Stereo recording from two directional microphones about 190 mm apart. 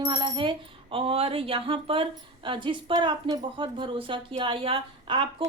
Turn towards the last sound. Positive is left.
turn(degrees=-25)  # may be behind; listen again after turning